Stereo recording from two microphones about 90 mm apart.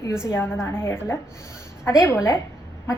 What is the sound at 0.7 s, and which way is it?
A woman's voice, 25° left (ahead or behind).